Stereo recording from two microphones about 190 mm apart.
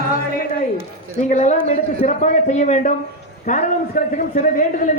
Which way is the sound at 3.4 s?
40° left (ahead or behind).